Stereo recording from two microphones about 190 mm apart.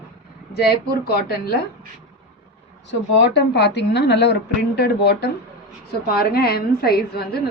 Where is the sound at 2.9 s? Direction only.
65° left (ahead or behind).